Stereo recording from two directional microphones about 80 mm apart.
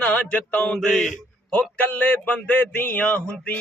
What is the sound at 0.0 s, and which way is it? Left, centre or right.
Mantra, centre.